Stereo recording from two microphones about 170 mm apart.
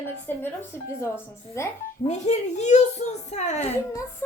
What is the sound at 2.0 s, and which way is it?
A child's voice, 40° left (ahead or behind).